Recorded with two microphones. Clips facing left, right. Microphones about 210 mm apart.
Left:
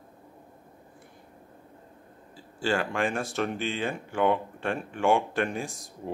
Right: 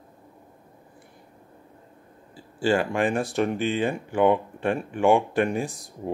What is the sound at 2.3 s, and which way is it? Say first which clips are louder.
Speech: right 5 dB; 15° right (ahead or behind).